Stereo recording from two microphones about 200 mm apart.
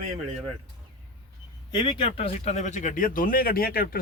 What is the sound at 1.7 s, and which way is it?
A man's voice, 25° left (ahead or behind).